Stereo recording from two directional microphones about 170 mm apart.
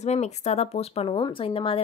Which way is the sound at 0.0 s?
40° left (ahead or behind).